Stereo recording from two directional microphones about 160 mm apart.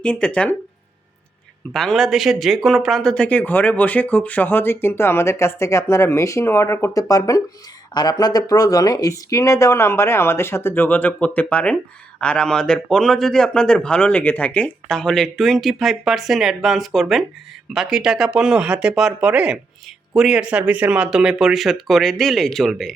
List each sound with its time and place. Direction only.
0.0 s speech: 5° left (ahead or behind)
1.7 s a man's voice: centre (ahead or behind)